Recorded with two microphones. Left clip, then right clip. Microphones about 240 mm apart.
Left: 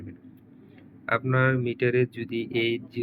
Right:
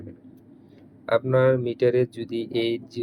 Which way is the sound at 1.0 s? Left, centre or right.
Centre.